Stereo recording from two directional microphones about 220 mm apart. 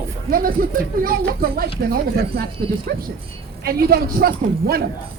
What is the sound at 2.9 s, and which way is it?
Speech, 45° right (ahead or behind).